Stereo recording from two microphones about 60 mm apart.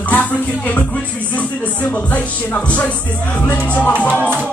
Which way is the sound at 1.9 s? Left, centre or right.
Left.